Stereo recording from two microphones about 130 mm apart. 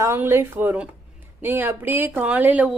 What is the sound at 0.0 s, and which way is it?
A woman's voice, 20° right (ahead or behind).